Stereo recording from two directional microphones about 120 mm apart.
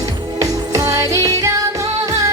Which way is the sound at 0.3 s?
25° right (ahead or behind).